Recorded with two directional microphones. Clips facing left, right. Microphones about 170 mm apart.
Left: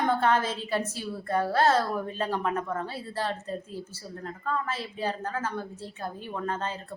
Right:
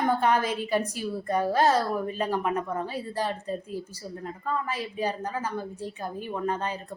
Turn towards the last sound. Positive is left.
turn(degrees=-15)  # may be behind; listen again after turning